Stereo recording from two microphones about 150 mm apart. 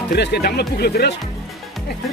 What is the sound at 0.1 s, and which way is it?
Speech, 90° left.